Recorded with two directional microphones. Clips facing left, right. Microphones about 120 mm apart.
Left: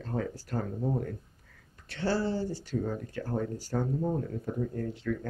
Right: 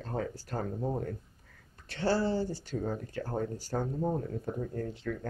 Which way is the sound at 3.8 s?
15° right (ahead or behind).